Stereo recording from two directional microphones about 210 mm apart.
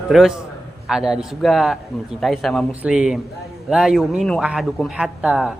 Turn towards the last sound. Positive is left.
turn(degrees=-5)  # may be behind; listen again after turning